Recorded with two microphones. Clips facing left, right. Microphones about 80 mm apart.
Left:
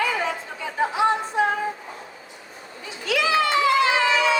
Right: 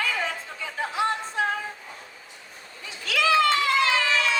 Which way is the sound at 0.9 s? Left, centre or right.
Centre.